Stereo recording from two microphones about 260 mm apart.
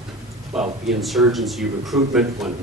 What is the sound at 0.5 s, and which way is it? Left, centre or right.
Speech, centre.